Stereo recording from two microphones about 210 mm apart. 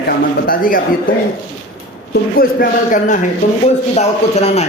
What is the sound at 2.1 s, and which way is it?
A man's voice, 45° left (ahead or behind).